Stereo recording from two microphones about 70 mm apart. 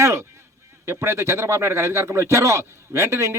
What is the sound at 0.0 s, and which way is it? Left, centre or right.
A man's voice, right.